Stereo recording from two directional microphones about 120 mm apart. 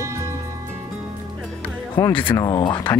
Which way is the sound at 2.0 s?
20° left (ahead or behind).